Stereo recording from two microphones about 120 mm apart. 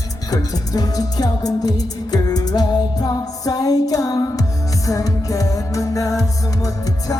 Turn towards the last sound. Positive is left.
turn(degrees=30)  # may be behind; listen again after turning